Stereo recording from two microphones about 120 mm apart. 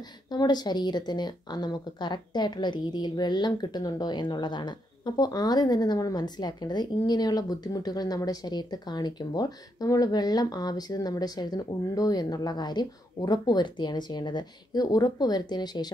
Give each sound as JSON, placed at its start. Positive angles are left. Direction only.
{"t": 0.3, "sound": "a woman's voice", "side_deg": 35}